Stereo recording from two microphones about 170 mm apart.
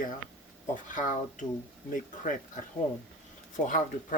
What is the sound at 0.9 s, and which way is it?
Speech, 50° left (ahead or behind).